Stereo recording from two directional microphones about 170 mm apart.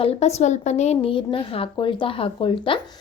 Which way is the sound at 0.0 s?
40° left (ahead or behind).